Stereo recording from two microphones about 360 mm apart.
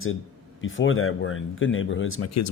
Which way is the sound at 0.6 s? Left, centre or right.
Left.